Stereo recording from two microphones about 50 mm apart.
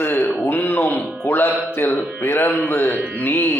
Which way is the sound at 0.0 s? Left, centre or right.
Left.